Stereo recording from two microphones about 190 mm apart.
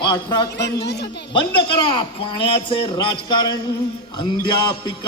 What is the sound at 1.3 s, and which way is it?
A man's voice, 25° left (ahead or behind).